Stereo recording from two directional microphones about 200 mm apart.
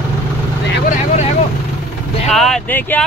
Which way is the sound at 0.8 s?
35° left (ahead or behind).